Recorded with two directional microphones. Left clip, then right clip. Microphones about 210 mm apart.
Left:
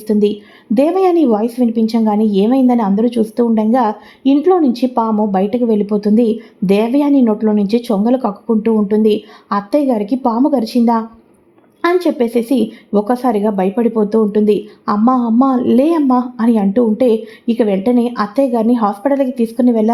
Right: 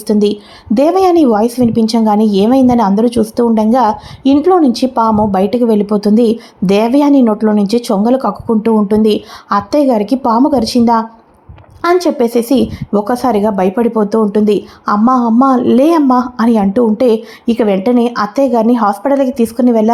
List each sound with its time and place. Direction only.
0.1 s a woman's voice: 20° right (ahead or behind)